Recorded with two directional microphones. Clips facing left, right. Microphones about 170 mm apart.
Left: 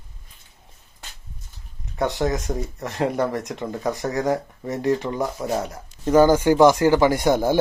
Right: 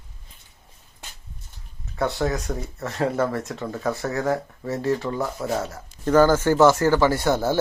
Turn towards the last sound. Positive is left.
turn(degrees=15)  # may be behind; listen again after turning